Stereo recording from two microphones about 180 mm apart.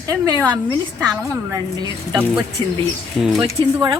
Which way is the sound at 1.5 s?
20° right (ahead or behind).